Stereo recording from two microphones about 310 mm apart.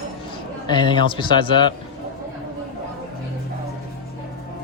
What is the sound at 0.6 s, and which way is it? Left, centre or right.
A man's voice, centre.